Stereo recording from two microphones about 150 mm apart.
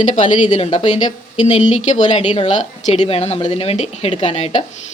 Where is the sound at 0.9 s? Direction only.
30° left (ahead or behind).